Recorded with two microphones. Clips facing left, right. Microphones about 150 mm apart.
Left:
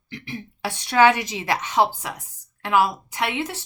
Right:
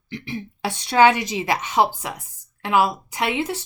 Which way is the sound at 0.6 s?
25° right (ahead or behind).